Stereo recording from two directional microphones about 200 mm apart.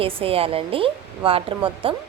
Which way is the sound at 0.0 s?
25° right (ahead or behind).